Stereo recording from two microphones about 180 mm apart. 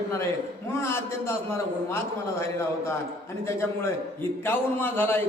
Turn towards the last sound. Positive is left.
turn(degrees=10)  # may be behind; listen again after turning